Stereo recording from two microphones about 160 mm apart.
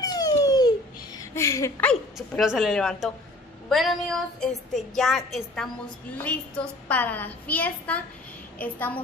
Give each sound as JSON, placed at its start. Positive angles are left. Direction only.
{"t": 0.0, "sound": "babbling", "side_deg": 25}
{"t": 1.9, "sound": "a woman's voice", "side_deg": 0}